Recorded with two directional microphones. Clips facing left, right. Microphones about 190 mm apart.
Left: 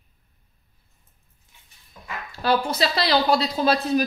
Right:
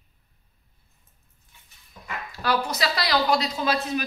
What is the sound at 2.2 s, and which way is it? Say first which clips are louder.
Speech: left 4 dB; 30° left (ahead or behind).